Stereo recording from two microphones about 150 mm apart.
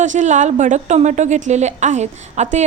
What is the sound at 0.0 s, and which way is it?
A woman's voice, 55° right (ahead or behind).